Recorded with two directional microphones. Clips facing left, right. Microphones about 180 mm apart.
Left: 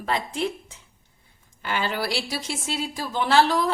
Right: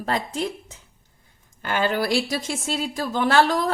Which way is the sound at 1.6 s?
50° right (ahead or behind).